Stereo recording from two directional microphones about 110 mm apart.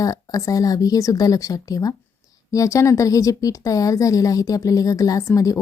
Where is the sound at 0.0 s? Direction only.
30° left (ahead or behind).